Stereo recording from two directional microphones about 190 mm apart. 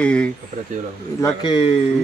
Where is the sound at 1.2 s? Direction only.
25° left (ahead or behind).